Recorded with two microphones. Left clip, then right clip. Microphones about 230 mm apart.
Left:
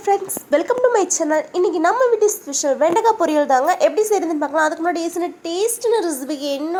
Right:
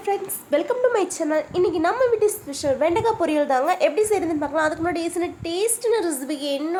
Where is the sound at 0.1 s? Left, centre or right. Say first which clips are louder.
Left 5 dB; centre.